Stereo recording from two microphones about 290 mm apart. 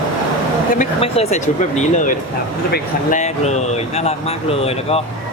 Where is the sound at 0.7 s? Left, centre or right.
Left.